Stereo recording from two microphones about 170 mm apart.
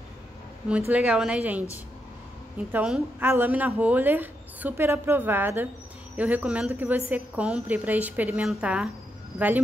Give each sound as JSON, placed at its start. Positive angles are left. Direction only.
{"t": 0.7, "sound": "speech", "side_deg": -10}
{"t": 2.7, "sound": "speech", "side_deg": -10}